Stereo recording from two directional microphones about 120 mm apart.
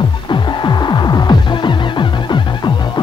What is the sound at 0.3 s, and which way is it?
Music, 35° left (ahead or behind).